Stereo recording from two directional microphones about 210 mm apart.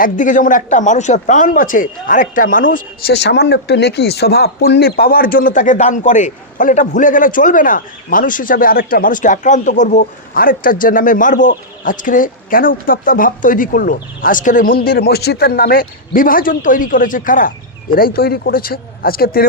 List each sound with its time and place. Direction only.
0.0 s speech: 40° left (ahead or behind)